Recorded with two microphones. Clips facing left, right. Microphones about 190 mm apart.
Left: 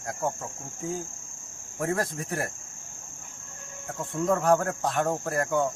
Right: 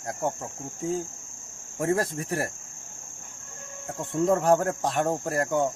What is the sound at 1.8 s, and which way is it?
Insect, 30° right (ahead or behind).